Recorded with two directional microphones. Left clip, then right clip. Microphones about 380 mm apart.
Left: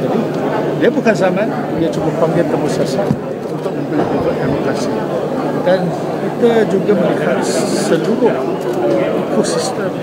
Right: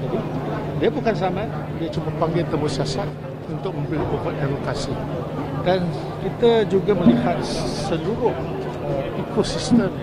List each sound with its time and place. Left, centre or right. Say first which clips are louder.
0.8 s speech: left 7 dB; right
6.4 s speech: left 4 dB; right